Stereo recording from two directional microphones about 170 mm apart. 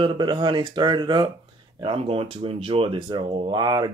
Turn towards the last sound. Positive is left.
turn(degrees=-25)  # may be behind; listen again after turning